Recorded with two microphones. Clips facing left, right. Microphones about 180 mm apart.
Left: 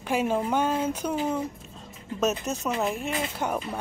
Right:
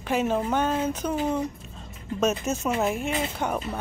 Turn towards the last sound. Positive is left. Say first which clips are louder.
# right 1 dB
turn(degrees=5)  # may be behind; listen again after turning